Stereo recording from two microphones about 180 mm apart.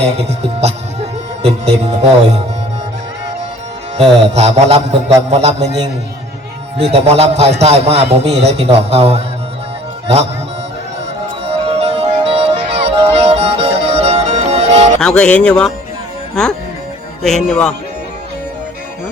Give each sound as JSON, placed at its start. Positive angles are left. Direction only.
{"t": 0.0, "sound": "speech", "side_deg": -35}
{"t": 3.9, "sound": "a man's voice", "side_deg": -35}
{"t": 6.9, "sound": "a man's voice", "side_deg": -35}
{"t": 11.6, "sound": "music", "side_deg": -35}
{"t": 15.0, "sound": "speech", "side_deg": 5}